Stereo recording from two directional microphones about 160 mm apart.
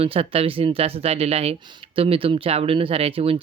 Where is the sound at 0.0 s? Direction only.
40° right (ahead or behind).